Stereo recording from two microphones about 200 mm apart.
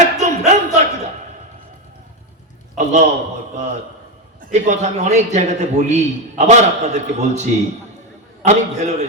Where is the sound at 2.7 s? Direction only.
35° right (ahead or behind).